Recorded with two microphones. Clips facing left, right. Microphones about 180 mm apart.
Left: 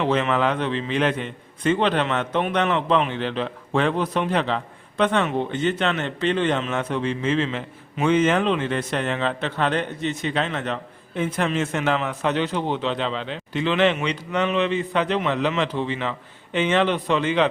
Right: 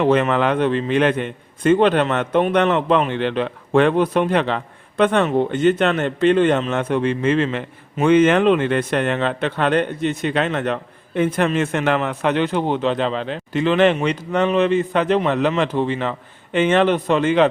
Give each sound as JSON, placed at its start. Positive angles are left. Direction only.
{"t": 0.0, "sound": "a man's voice", "side_deg": -55}
{"t": 6.7, "sound": "a man's voice", "side_deg": -55}